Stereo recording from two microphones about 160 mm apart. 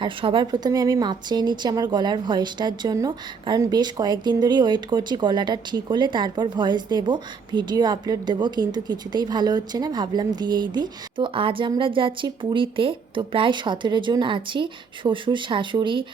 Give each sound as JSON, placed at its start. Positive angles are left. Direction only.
{"t": 0.0, "sound": "a woman's voice", "side_deg": -35}